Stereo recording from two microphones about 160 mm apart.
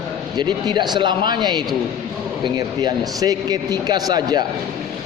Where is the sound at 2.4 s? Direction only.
25° right (ahead or behind).